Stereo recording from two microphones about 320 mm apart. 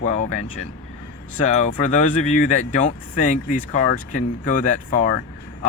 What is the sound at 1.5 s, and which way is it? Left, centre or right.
Speech, left.